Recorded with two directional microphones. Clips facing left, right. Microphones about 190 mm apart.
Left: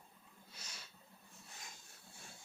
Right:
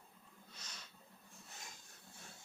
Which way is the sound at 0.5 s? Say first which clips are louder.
Left 1 dB; 10° left (ahead or behind).